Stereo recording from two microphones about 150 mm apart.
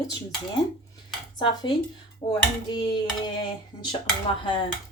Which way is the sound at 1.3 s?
30° left (ahead or behind).